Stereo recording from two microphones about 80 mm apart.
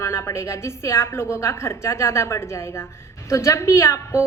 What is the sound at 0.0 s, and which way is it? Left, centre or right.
A woman's voice, left.